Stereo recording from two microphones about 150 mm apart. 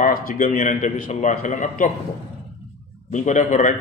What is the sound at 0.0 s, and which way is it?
A man's voice, 70° left (ahead or behind).